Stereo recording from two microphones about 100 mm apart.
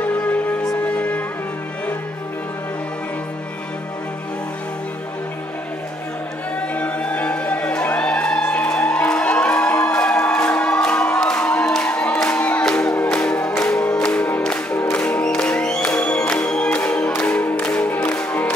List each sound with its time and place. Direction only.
0.8 s music: 10° left (ahead or behind)
6.7 s music: 15° left (ahead or behind)